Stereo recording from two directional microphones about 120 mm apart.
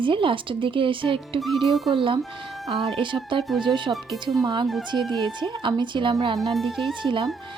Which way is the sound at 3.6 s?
40° right (ahead or behind).